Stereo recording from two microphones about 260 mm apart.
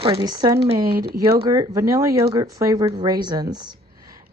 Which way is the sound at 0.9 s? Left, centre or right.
Right.